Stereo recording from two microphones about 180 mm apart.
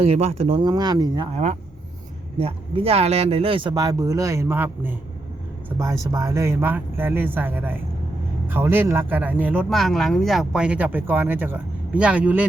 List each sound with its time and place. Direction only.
0.0 s speech: 35° right (ahead or behind)
2.4 s speech: 35° right (ahead or behind); by 12.5 s 10° right (ahead or behind)